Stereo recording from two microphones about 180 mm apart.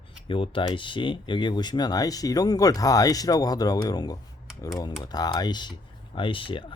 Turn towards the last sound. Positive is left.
turn(degrees=30)  # may be behind; listen again after turning